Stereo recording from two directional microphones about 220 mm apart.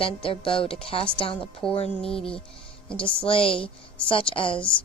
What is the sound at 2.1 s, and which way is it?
Speech, 5° left (ahead or behind).